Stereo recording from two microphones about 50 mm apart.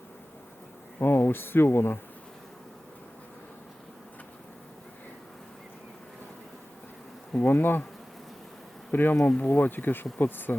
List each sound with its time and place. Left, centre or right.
0.9 s speech: left
7.3 s bee: left
8.9 s bee: left